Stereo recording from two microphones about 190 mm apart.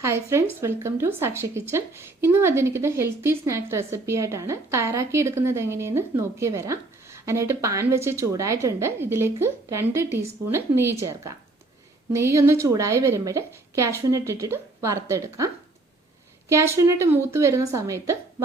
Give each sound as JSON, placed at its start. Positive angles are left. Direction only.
{"t": 0.0, "sound": "speech", "side_deg": -15}
{"t": 16.5, "sound": "speech", "side_deg": -15}